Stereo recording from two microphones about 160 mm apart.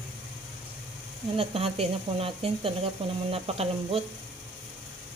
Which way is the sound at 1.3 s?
40° right (ahead or behind).